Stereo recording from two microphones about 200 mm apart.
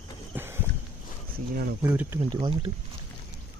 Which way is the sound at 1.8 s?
10° right (ahead or behind).